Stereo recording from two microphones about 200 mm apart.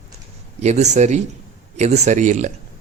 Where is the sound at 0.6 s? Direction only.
35° right (ahead or behind).